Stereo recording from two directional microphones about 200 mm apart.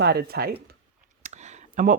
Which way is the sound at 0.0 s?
55° right (ahead or behind).